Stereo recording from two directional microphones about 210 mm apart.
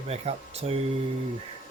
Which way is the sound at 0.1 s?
30° right (ahead or behind).